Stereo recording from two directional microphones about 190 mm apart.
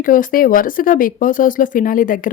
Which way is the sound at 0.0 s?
45° left (ahead or behind).